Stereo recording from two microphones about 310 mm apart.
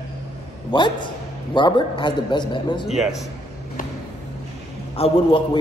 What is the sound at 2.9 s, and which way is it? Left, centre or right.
Speech, centre.